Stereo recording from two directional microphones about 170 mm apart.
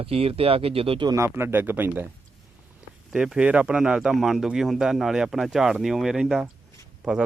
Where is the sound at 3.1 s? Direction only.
5° right (ahead or behind).